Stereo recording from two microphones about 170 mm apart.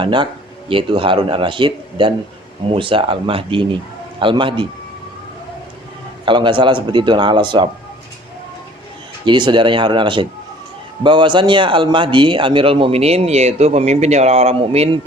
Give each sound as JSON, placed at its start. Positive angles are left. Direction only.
{"t": 0.0, "sound": "a man's voice", "side_deg": -30}
{"t": 6.2, "sound": "a man's voice", "side_deg": -30}
{"t": 9.2, "sound": "a man's voice", "side_deg": -25}